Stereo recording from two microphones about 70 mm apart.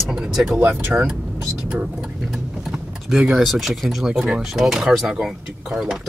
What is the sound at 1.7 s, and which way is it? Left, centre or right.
Speech, centre.